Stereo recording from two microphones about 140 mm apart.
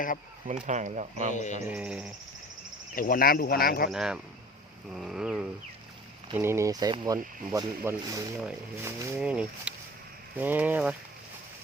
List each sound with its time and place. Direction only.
0.6 s speech: 60° right (ahead or behind)
1.3 s bird: 60° left (ahead or behind)
1.6 s speech: 10° right (ahead or behind)
2.9 s speech: 85° left
3.9 s a sound: 5° right (ahead or behind)
6.3 s speech: 20° right (ahead or behind)
9.1 s speech: 10° right (ahead or behind)